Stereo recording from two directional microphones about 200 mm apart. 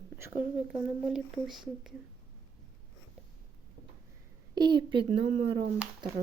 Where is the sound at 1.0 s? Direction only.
Centre (ahead or behind).